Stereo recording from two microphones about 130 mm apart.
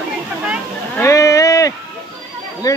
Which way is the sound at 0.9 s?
20° left (ahead or behind).